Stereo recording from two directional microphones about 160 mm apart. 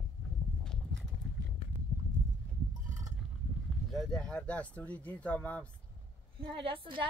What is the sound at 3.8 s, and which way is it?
Speech, centre (ahead or behind).